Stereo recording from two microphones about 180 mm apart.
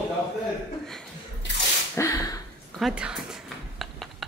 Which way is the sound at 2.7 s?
5° right (ahead or behind).